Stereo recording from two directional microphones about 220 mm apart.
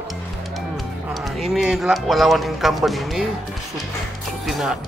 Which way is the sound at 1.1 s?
Centre (ahead or behind).